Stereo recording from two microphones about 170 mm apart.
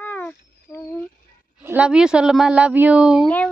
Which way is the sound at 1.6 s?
10° right (ahead or behind).